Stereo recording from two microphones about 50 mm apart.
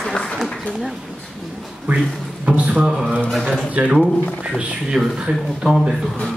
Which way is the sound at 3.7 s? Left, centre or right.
Right.